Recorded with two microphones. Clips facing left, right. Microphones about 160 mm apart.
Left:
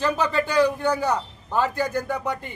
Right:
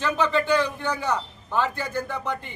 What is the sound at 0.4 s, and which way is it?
Speech, 10° left (ahead or behind).